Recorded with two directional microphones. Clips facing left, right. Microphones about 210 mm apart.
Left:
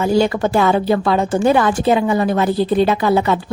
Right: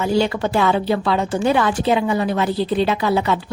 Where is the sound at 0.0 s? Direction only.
45° left (ahead or behind).